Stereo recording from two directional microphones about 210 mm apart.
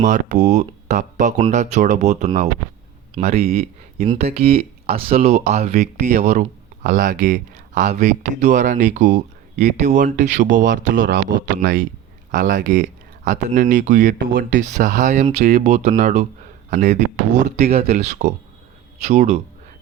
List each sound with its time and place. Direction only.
0.0 s speech: 35° right (ahead or behind)
3.5 s speech: 45° right (ahead or behind)
4.0 s speech: 30° right (ahead or behind)
11.0 s speech: 60° right (ahead or behind)
11.5 s speech: 40° right (ahead or behind)